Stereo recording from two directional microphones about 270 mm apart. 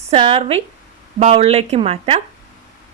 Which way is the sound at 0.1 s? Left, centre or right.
Right.